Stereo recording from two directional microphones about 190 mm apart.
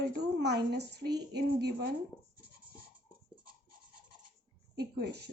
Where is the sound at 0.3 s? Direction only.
60° right (ahead or behind).